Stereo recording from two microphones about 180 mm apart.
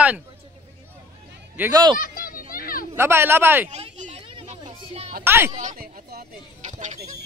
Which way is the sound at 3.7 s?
40° right (ahead or behind).